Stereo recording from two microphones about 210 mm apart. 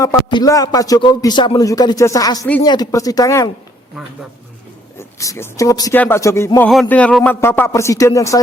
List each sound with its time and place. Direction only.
0.0 s speech: 20° left (ahead or behind)
4.9 s speech: 15° left (ahead or behind)